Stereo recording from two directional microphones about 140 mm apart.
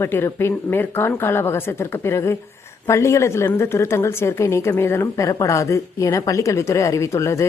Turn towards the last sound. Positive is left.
turn(degrees=20)  # may be behind; listen again after turning